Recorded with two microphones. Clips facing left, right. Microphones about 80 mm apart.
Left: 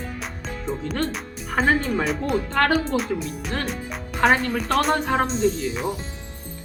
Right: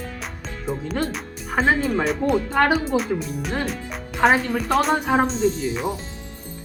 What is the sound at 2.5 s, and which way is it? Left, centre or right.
Speech, centre.